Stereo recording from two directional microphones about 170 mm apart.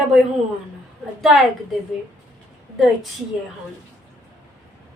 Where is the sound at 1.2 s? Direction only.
Centre (ahead or behind).